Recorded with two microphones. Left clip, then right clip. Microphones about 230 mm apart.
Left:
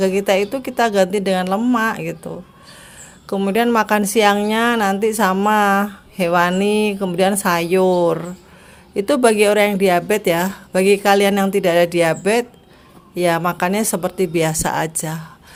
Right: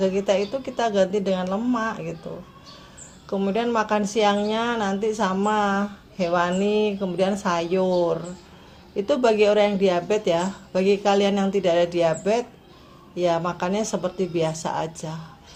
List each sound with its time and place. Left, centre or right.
0.0 s a woman's voice: left
3.2 s a woman's voice: left